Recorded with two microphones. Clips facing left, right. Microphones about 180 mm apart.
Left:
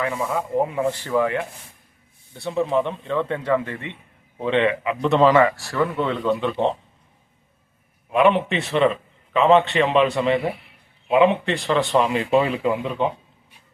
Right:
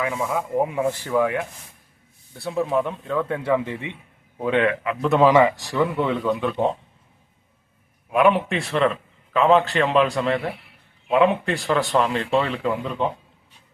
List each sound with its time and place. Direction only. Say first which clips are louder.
0.0 s a man's voice: even; 5° right (ahead or behind)
6.1 s a man's voice: left 1 dB; centre (ahead or behind)
8.1 s a man's voice: left 1 dB; centre (ahead or behind)